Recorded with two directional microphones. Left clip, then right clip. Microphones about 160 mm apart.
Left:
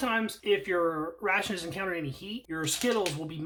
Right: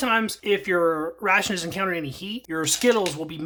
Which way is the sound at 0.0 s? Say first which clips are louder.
Right 7 dB; 35° right (ahead or behind).